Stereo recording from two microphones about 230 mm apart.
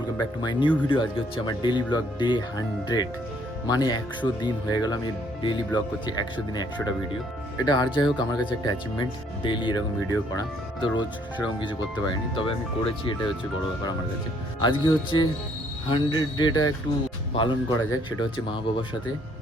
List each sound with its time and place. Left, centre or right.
0.4 s speech: left
14.6 s speech: left